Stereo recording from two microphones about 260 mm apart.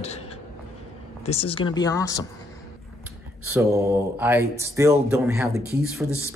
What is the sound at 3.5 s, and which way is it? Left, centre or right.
Speech, centre.